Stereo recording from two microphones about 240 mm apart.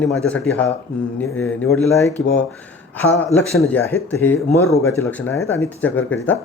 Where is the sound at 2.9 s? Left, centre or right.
Centre.